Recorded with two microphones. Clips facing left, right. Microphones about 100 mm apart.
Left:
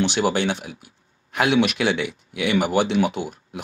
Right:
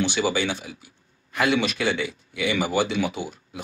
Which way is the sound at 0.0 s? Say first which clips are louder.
Left 3 dB; 60° left (ahead or behind).